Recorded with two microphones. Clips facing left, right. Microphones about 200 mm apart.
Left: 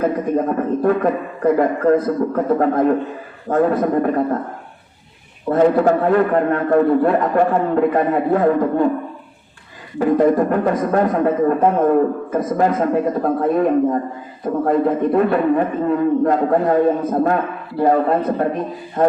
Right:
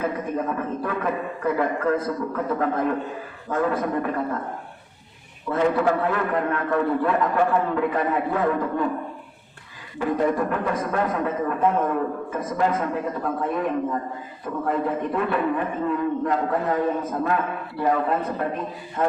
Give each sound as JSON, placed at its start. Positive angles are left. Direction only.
{"t": 0.0, "sound": "speech", "side_deg": 40}
{"t": 5.5, "sound": "speech", "side_deg": 40}
{"t": 10.0, "sound": "speech", "side_deg": 40}